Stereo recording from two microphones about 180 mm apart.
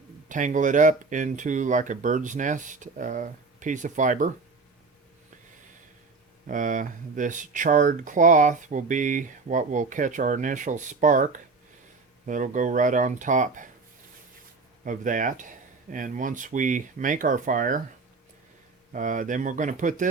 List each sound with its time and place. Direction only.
0.3 s speech: 45° right (ahead or behind)
6.5 s speech: 45° right (ahead or behind)
14.8 s speech: 45° right (ahead or behind)
18.9 s speech: 45° right (ahead or behind)